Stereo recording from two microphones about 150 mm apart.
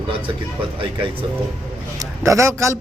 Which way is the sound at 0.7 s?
35° right (ahead or behind).